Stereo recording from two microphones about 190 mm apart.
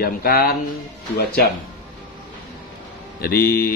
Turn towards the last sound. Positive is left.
turn(degrees=55)  # may be behind; listen again after turning